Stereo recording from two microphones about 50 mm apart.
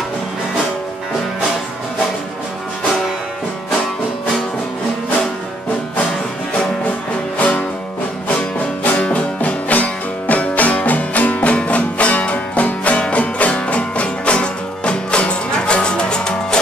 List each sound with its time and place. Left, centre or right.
7.3 s music: left